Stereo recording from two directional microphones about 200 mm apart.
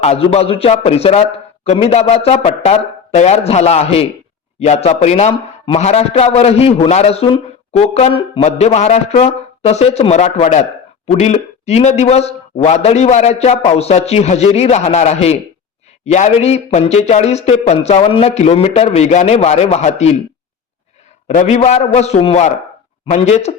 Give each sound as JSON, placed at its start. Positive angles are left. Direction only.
{"t": 0.0, "sound": "a man's voice", "side_deg": 30}
{"t": 21.2, "sound": "a man's voice", "side_deg": 35}